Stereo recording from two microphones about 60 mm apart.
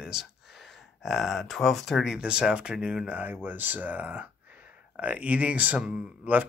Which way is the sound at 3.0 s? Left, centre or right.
Right.